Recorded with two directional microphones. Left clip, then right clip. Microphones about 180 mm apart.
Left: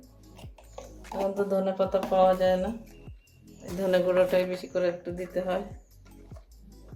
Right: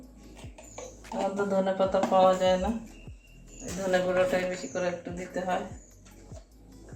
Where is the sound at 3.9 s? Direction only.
50° left (ahead or behind).